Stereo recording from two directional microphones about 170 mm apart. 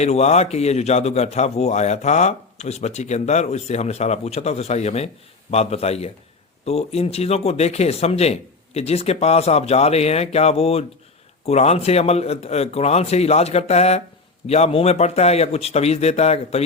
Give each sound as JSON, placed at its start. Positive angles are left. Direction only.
{"t": 0.0, "sound": "a man's voice", "side_deg": 40}